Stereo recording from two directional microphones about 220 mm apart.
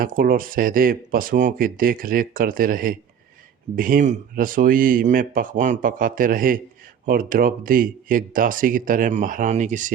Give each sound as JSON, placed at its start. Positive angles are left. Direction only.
{"t": 0.0, "sound": "speech", "side_deg": -40}